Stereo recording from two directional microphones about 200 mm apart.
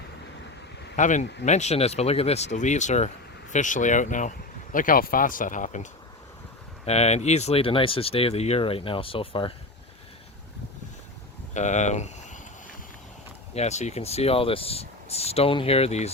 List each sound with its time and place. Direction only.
0.9 s speech: 40° left (ahead or behind)
11.5 s speech: 35° left (ahead or behind)
13.5 s speech: 35° left (ahead or behind)